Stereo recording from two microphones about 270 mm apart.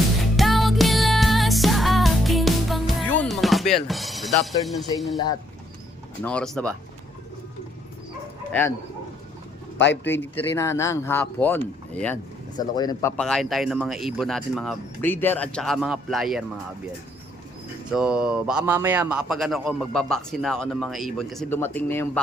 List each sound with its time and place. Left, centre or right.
0.3 s music: centre
4.6 s a man's voice: centre
6.2 s a man's voice: centre
9.7 s a man's voice: left
10.1 s a man's voice: centre
17.9 s a man's voice: centre